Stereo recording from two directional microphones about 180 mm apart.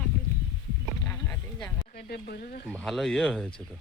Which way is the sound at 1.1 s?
10° left (ahead or behind).